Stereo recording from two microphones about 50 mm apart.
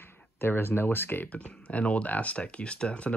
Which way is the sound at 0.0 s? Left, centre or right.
Left.